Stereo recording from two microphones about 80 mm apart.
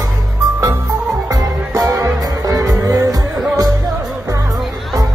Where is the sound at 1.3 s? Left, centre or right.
Right.